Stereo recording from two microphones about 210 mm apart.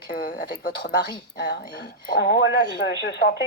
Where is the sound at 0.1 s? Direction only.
50° left (ahead or behind).